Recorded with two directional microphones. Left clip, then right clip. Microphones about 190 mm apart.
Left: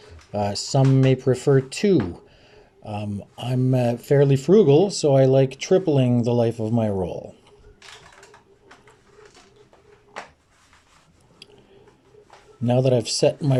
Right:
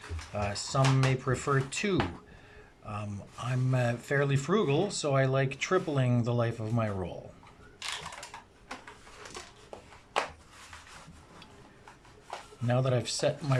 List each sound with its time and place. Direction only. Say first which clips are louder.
0.3 s speech: left 8 dB; 35° left (ahead or behind)
12.6 s speech: left 10 dB; 30° left (ahead or behind)